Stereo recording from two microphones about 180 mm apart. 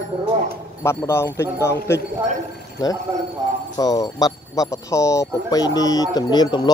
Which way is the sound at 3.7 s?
20° left (ahead or behind).